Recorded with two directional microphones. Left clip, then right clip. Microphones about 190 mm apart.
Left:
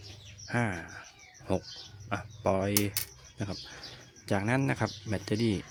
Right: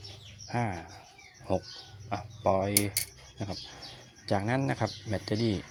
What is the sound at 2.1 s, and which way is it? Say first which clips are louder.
Speech: right 2 dB; 20° left (ahead or behind).